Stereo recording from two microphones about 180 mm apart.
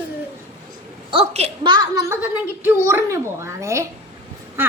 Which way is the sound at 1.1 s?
35° right (ahead or behind).